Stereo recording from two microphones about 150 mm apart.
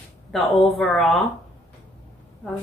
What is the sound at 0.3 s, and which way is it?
Speech, centre (ahead or behind).